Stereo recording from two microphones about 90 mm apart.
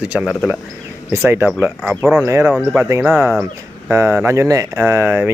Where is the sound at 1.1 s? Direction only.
30° right (ahead or behind).